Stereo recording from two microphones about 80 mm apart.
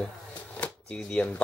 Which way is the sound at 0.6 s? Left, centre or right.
Centre.